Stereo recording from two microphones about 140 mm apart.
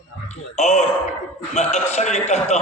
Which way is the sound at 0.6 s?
55° left (ahead or behind).